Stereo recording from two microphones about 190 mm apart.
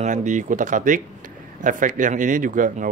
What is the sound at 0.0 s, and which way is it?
Speech, 40° right (ahead or behind).